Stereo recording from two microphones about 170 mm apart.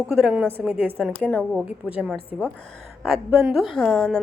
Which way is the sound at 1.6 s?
10° right (ahead or behind).